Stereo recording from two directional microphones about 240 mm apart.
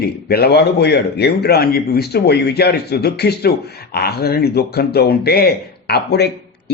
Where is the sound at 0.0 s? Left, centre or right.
Left.